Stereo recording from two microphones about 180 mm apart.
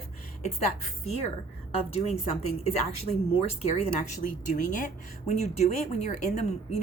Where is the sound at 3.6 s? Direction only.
35° left (ahead or behind).